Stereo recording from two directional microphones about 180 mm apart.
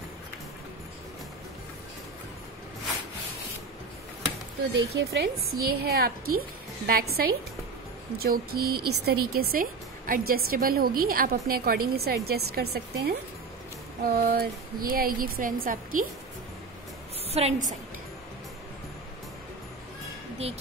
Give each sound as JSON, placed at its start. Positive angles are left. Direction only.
{"t": 4.7, "sound": "a woman's voice", "side_deg": -70}
{"t": 17.3, "sound": "a woman's voice", "side_deg": -35}